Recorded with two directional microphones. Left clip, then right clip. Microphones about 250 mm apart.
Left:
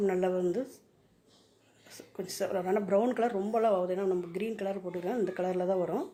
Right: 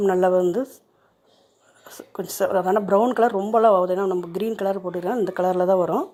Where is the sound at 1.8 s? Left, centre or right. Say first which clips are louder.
Right 9 dB; right.